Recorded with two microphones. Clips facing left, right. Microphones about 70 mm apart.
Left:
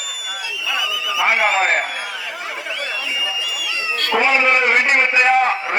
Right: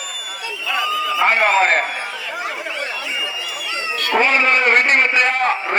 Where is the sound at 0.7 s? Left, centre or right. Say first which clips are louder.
Right 4 dB; right.